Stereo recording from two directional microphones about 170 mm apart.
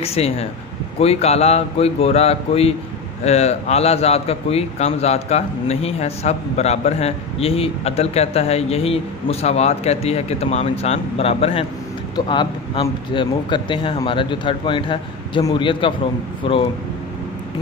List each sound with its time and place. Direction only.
0.0 s a man's voice: 35° left (ahead or behind)